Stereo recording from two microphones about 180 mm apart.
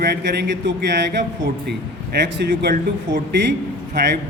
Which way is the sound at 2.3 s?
65° right (ahead or behind).